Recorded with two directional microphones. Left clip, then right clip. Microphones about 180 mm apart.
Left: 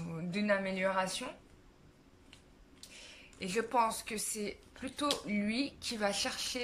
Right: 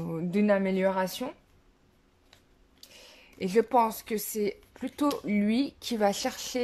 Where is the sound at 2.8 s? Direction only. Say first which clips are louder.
Right 1 dB; 30° right (ahead or behind).